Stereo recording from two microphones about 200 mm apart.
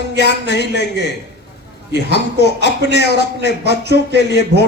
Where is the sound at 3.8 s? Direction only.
55° right (ahead or behind).